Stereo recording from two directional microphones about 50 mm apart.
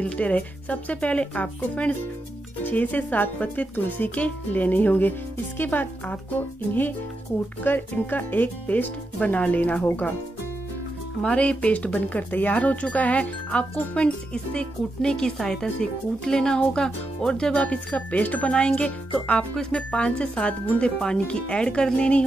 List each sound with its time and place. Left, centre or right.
0.0 s speech: left
11.2 s speech: left